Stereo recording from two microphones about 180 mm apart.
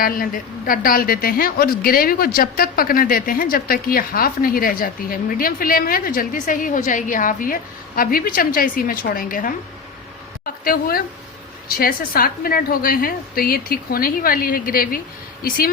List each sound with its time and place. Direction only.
0.0 s speech: 50° left (ahead or behind)
10.6 s a woman's voice: 55° left (ahead or behind)